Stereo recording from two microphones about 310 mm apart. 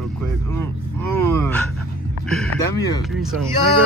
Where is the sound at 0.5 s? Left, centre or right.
Centre.